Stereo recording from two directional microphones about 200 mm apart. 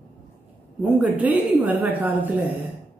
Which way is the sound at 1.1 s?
10° right (ahead or behind).